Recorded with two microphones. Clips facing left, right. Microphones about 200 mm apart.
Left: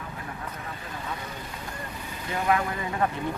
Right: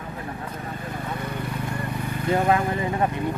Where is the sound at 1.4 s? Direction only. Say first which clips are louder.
Right 8 dB; 60° right (ahead or behind).